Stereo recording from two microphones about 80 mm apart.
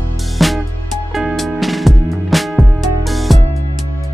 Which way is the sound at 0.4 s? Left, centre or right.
Centre.